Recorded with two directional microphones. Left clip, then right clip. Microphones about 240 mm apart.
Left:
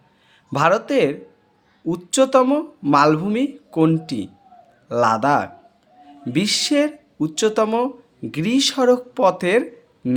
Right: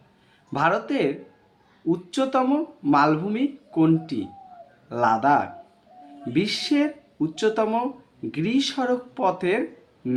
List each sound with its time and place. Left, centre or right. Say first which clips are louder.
0.5 s speech: left 5 dB; left